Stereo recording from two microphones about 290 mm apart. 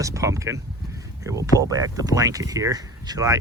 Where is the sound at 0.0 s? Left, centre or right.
Centre.